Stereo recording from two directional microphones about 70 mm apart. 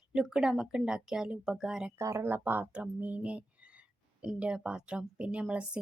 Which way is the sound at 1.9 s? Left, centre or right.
Right.